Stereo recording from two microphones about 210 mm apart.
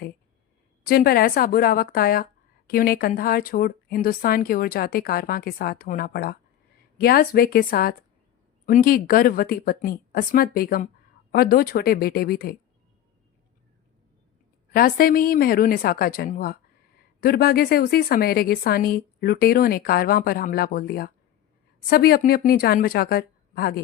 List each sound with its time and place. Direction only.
0.9 s a woman's voice: 45° left (ahead or behind)
14.7 s a woman's voice: 45° left (ahead or behind)